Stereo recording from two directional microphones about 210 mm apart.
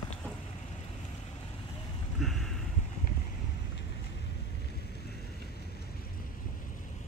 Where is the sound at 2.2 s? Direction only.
Centre (ahead or behind).